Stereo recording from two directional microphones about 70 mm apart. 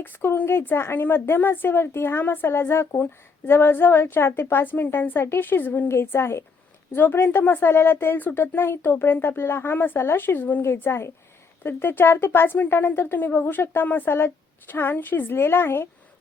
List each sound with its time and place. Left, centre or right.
0.0 s a woman's voice: left
5.9 s a woman's voice: left